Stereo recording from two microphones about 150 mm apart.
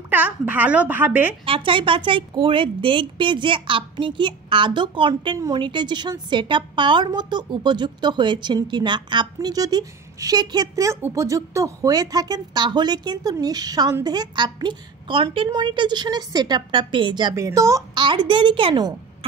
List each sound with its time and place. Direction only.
0.1 s a woman's voice: 10° right (ahead or behind)
1.4 s a woman's voice: 35° right (ahead or behind)